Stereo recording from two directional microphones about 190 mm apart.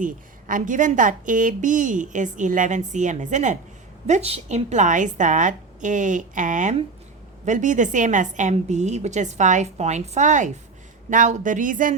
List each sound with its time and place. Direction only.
0.0 s a woman's voice: 45° right (ahead or behind)